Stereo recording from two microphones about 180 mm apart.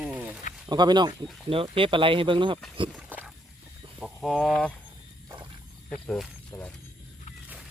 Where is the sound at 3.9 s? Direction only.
Centre (ahead or behind).